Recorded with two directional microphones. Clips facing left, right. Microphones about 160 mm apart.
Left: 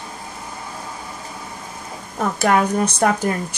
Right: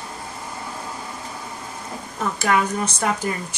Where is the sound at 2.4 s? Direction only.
50° left (ahead or behind).